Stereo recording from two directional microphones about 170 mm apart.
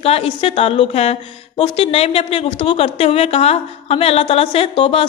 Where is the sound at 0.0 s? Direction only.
35° left (ahead or behind).